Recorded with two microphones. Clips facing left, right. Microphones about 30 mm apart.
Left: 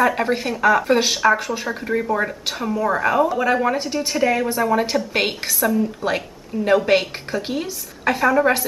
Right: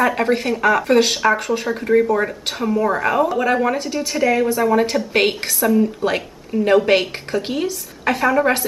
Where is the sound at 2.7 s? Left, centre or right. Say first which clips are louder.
Right 1 dB; right.